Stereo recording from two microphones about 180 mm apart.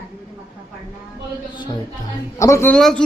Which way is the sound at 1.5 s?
25° left (ahead or behind).